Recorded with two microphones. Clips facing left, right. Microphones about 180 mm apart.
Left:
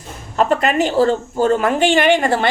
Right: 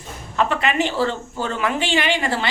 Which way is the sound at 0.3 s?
40° left (ahead or behind).